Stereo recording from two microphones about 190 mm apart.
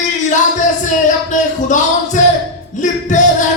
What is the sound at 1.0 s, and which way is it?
Music, 40° left (ahead or behind).